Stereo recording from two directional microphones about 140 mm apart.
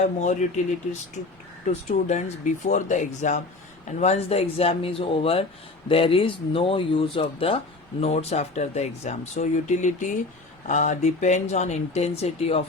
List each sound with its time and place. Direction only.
0.0 s speech: 60° left (ahead or behind)
1.9 s speech: 55° left (ahead or behind)